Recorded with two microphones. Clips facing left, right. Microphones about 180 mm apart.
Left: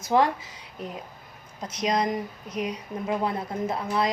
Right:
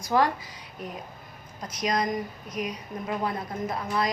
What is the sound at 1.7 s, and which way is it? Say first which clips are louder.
A woman's voice: left 2 dB; 25° left (ahead or behind).